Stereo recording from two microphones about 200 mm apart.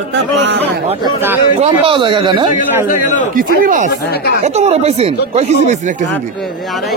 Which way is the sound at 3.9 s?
55° left (ahead or behind).